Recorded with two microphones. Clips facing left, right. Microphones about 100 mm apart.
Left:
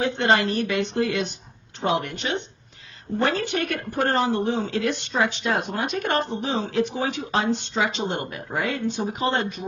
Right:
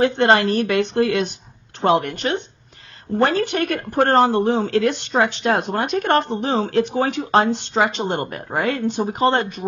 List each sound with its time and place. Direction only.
0.0 s speech: 55° right (ahead or behind)